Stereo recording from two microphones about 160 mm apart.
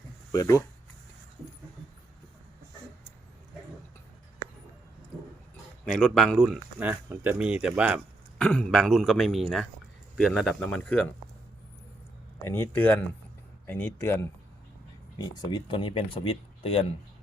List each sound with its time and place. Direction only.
0.3 s speech: 20° left (ahead or behind)
5.8 s a man's voice: 5° left (ahead or behind)
6.7 s speech: 10° right (ahead or behind)
8.4 s a man's voice: 5° left (ahead or behind)
12.5 s speech: 10° left (ahead or behind)
15.2 s speech: 25° left (ahead or behind)